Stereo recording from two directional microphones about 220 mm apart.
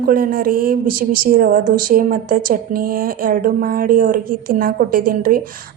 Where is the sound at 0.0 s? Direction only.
40° right (ahead or behind).